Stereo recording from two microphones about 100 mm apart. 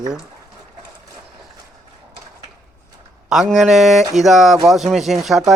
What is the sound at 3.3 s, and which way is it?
Speech, 5° right (ahead or behind).